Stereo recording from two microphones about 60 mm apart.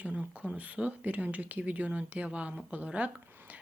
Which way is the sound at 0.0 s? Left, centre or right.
Right.